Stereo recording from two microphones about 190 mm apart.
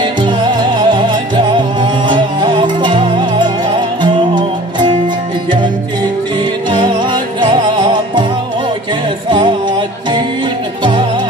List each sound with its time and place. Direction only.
0.0 s music: 25° right (ahead or behind)
6.7 s music: 25° right (ahead or behind)
9.3 s music: 25° right (ahead or behind)